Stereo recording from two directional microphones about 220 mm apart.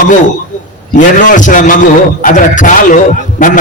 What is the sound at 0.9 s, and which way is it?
A man's voice, 35° left (ahead or behind).